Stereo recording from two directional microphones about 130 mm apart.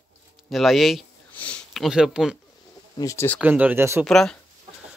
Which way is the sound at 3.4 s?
10° right (ahead or behind).